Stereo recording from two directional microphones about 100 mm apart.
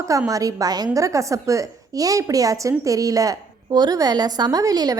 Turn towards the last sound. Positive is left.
turn(degrees=-40)  # may be behind; listen again after turning